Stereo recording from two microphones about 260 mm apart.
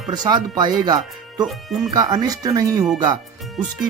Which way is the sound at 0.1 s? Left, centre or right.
Centre.